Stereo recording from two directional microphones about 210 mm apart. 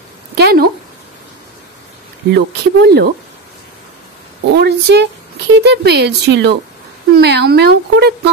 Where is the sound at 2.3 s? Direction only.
50° right (ahead or behind).